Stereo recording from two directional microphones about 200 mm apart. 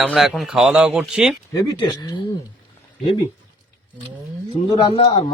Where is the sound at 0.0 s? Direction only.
Centre (ahead or behind).